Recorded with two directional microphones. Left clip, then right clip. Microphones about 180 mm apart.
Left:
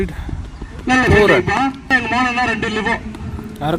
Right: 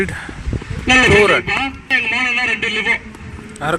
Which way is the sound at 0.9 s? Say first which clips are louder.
Right 2 dB; 40° left (ahead or behind).